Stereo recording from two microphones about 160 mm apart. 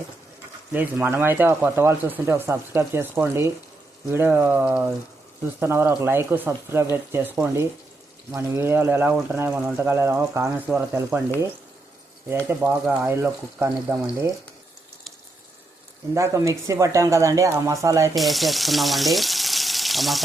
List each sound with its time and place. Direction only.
0.7 s speech: 10° right (ahead or behind)
12.5 s speech: 15° right (ahead or behind)
16.1 s speech: 20° right (ahead or behind)
18.1 s speech: centre (ahead or behind)